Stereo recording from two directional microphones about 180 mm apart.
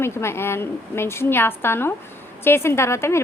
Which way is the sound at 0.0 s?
15° left (ahead or behind).